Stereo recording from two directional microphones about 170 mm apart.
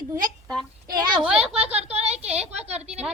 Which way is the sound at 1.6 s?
40° right (ahead or behind).